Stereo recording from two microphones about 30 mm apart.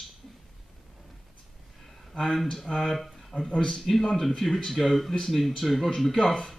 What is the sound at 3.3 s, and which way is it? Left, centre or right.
Speech, left.